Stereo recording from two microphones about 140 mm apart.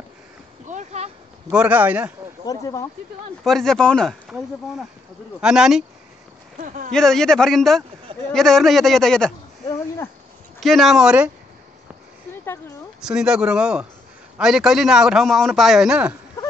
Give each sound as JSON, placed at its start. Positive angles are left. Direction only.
{"t": 0.7, "sound": "a sound", "side_deg": -55}
{"t": 1.5, "sound": "a man's voice", "side_deg": -10}
{"t": 2.4, "sound": "speech", "side_deg": 25}
{"t": 3.4, "sound": "a man's voice", "side_deg": 5}
{"t": 6.6, "sound": "speech", "side_deg": -70}
{"t": 6.9, "sound": "a man's voice", "side_deg": 5}
{"t": 10.6, "sound": "a man's voice", "side_deg": 0}
{"t": 13.0, "sound": "a man's voice", "side_deg": -5}